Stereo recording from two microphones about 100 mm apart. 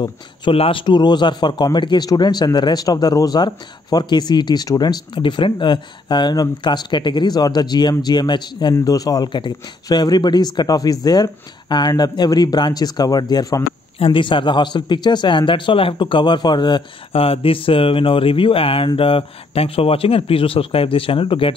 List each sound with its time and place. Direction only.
0.5 s a man's voice: 65° left (ahead or behind); by 8.7 s 45° left (ahead or behind)
8.7 s a man's voice: 35° left (ahead or behind)
13.9 s a man's voice: 60° left (ahead or behind)
17.1 s a man's voice: 70° left (ahead or behind)